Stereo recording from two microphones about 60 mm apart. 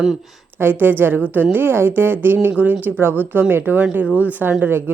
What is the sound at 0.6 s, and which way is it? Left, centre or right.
Speech, right.